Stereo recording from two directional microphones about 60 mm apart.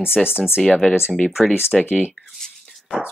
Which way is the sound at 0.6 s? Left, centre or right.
Centre.